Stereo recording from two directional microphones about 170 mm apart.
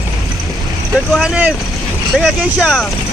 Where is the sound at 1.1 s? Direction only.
5° right (ahead or behind).